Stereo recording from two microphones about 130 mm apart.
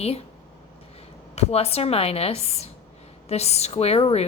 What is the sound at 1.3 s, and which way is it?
A woman's voice, 50° left (ahead or behind).